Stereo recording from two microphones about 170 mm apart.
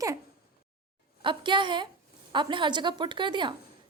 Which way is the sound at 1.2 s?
30° right (ahead or behind).